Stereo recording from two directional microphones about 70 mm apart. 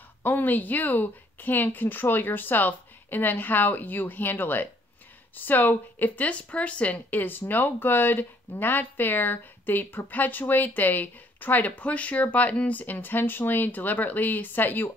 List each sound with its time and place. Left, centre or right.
0.2 s speech: left